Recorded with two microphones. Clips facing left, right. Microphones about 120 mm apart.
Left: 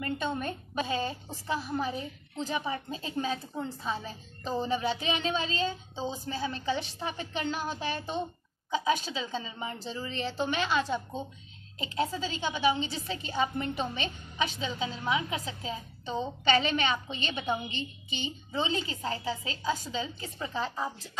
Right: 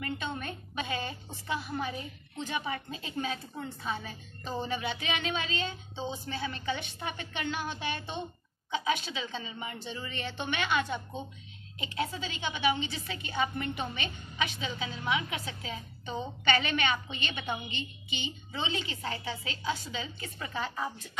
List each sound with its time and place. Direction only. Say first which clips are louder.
0.0 s a woman's voice: left 4 dB; 40° left (ahead or behind)